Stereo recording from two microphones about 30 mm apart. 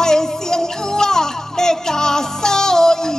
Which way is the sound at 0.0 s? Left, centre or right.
Centre.